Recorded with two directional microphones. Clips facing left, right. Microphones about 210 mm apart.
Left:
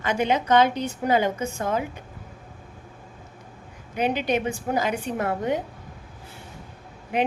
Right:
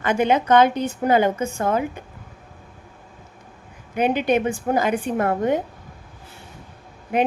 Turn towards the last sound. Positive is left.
turn(degrees=-50)  # may be behind; listen again after turning